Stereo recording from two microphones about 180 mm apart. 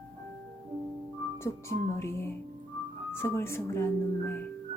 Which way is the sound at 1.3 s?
15° left (ahead or behind).